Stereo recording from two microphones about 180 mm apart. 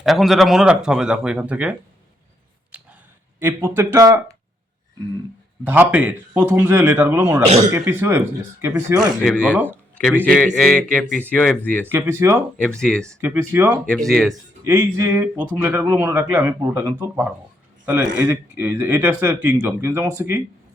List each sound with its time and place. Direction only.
0.0 s speech: centre (ahead or behind)
2.7 s a sound: 5° right (ahead or behind)
3.4 s speech: 10° right (ahead or behind)
5.6 s speech: 10° right (ahead or behind)
9.2 s speech: 5° left (ahead or behind)
11.9 s speech: 15° right (ahead or behind)
12.8 s speech: 5° left (ahead or behind)
13.1 s speech: 15° right (ahead or behind)
13.8 s speech: 5° left (ahead or behind)
14.6 s speech: 15° right (ahead or behind)